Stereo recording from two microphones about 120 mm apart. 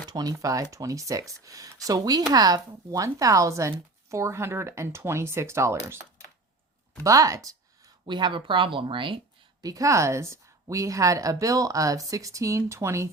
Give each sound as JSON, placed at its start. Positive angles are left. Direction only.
{"t": 0.1, "sound": "speech", "side_deg": -30}
{"t": 7.0, "sound": "speech", "side_deg": -25}
{"t": 8.0, "sound": "speech", "side_deg": -40}
{"t": 9.6, "sound": "speech", "side_deg": -30}